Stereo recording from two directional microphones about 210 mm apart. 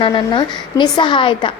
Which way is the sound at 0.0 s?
20° left (ahead or behind).